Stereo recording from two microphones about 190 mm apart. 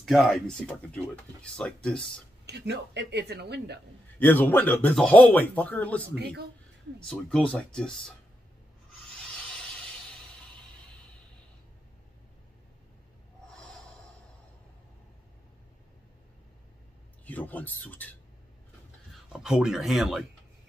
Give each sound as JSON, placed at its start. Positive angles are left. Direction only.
{"t": 0.0, "sound": "speech", "side_deg": 0}
{"t": 2.4, "sound": "speech", "side_deg": -60}
{"t": 4.2, "sound": "speech", "side_deg": 10}
{"t": 6.1, "sound": "speech", "side_deg": -60}
{"t": 7.1, "sound": "speech", "side_deg": 5}
{"t": 9.1, "sound": "rub", "side_deg": 5}
{"t": 17.2, "sound": "a sound", "side_deg": 10}
{"t": 19.3, "sound": "speech", "side_deg": -5}